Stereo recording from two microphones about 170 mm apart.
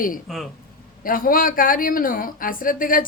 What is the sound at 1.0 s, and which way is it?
A woman's voice, 55° left (ahead or behind).